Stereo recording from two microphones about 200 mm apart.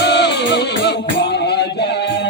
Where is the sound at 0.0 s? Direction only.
55° left (ahead or behind).